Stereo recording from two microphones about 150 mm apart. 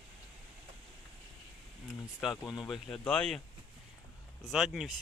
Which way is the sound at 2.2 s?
Centre (ahead or behind).